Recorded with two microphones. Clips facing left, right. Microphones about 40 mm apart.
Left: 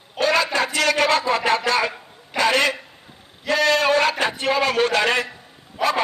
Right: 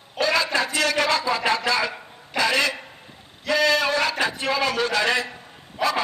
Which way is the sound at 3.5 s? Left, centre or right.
Left.